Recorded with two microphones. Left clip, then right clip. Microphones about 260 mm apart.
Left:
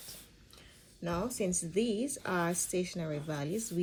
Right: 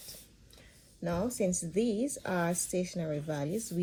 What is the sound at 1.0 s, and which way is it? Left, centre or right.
A woman's voice, left.